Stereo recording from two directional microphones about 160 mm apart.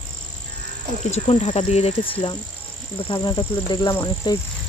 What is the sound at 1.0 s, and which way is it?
Cricket, 45° left (ahead or behind).